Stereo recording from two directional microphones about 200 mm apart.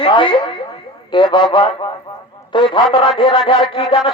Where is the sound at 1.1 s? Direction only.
25° left (ahead or behind).